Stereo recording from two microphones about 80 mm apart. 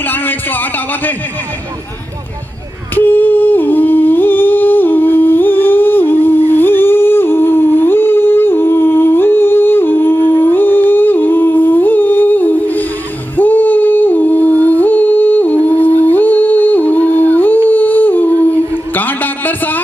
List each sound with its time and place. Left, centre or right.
0.0 s speech: left
2.9 s humming: left